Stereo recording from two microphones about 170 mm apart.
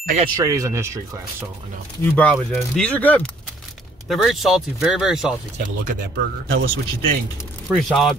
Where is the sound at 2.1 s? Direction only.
5° left (ahead or behind).